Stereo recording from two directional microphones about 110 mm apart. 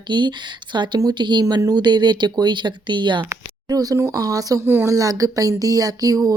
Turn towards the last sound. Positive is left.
turn(degrees=-35)  # may be behind; listen again after turning